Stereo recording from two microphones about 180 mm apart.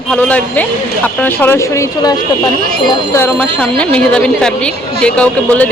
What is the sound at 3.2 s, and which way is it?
Speech, 10° left (ahead or behind).